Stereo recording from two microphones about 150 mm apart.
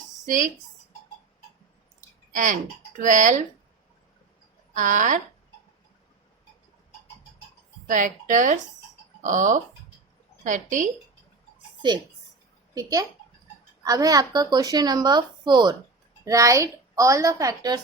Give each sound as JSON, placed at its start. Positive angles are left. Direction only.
{"t": 0.3, "sound": "speech", "side_deg": -55}
{"t": 2.0, "sound": "a sound", "side_deg": -55}
{"t": 3.0, "sound": "speech", "side_deg": -55}
{"t": 4.7, "sound": "speech", "side_deg": -60}
{"t": 7.9, "sound": "speech", "side_deg": -60}
{"t": 12.7, "sound": "speech", "side_deg": -25}